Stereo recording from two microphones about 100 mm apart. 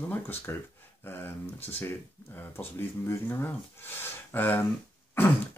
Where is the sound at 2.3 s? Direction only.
20° left (ahead or behind).